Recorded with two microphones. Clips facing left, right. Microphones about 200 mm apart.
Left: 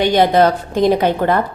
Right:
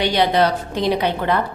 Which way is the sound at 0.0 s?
50° left (ahead or behind).